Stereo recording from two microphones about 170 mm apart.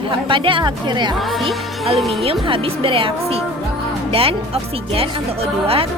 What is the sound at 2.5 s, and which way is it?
Speech, 30° right (ahead or behind).